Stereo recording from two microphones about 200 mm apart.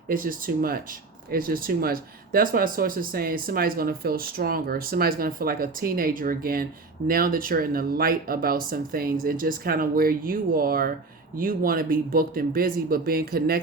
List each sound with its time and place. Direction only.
0.1 s speech: 45° right (ahead or behind)